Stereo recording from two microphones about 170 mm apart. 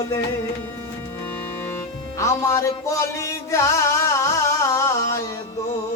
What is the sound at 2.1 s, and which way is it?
Music, 15° left (ahead or behind).